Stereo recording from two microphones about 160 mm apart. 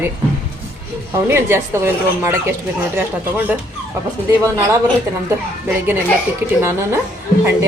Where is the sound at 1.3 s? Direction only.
15° right (ahead or behind).